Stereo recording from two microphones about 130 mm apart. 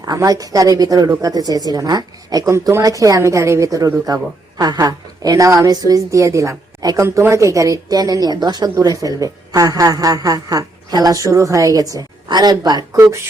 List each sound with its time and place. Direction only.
0.0 s a woman's voice: 30° right (ahead or behind)